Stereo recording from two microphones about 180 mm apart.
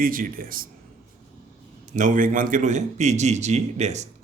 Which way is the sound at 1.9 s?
45° right (ahead or behind).